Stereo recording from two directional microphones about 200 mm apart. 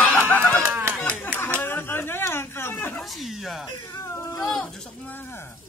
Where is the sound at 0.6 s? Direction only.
5° right (ahead or behind).